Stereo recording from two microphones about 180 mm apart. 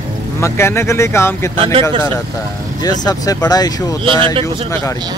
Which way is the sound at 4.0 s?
30° right (ahead or behind).